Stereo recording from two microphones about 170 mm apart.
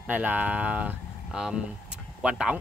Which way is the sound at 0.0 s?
10° right (ahead or behind).